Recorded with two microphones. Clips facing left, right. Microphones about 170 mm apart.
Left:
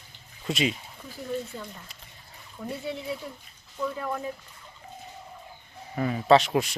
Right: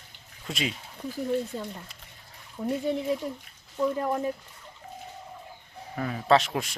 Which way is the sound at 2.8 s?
45° right (ahead or behind).